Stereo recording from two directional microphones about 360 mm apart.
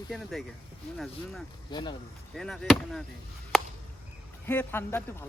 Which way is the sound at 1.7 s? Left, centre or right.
Centre.